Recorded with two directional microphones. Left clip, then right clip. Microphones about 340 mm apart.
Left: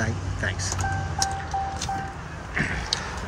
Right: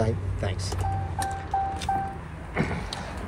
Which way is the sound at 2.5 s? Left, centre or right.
Centre.